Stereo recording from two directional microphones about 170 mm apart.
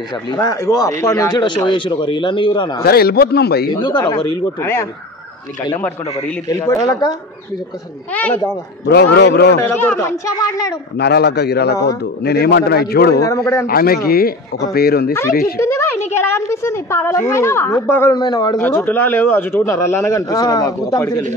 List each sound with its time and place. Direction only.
0.3 s speech: 20° left (ahead or behind)
2.8 s a man's voice: 65° left (ahead or behind)
3.7 s speech: 25° left (ahead or behind)
4.6 s a man's voice: 15° left (ahead or behind)
6.5 s speech: 20° left (ahead or behind)
8.1 s a man's voice: 10° left (ahead or behind)
8.8 s a man's voice: 75° left (ahead or behind)
9.6 s a man's voice: 15° left (ahead or behind)
11.0 s a man's voice: 75° left (ahead or behind)
13.7 s speech: 60° left (ahead or behind)
15.6 s a sound: 15° left (ahead or behind)
16.3 s a man's voice: 15° left (ahead or behind)
18.6 s a man's voice: 10° left (ahead or behind)